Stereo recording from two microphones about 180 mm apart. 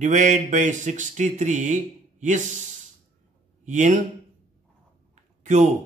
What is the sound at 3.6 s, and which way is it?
Speech, 45° right (ahead or behind).